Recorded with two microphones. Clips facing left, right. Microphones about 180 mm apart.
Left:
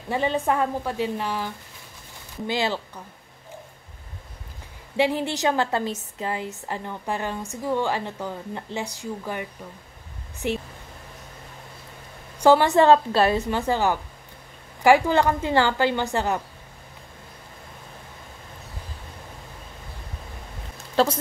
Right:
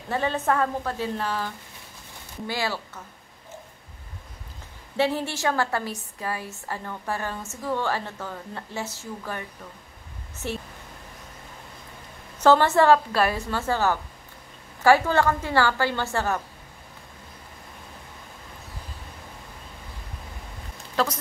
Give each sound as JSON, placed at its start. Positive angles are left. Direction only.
{"t": 0.1, "sound": "a woman's voice", "side_deg": 15}
{"t": 4.9, "sound": "a woman's voice", "side_deg": 15}
{"t": 12.4, "sound": "a woman's voice", "side_deg": 15}
{"t": 20.9, "sound": "speech", "side_deg": 30}